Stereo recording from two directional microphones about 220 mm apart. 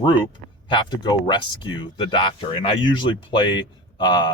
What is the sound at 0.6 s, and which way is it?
Speech, 20° left (ahead or behind).